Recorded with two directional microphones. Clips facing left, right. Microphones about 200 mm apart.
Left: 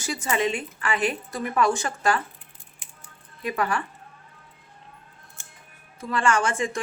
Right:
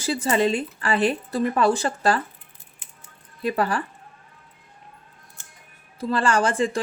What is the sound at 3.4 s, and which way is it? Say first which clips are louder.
Speech: right 3 dB; 35° right (ahead or behind).